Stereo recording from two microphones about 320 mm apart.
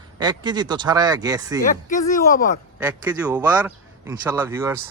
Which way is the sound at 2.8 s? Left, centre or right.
Centre.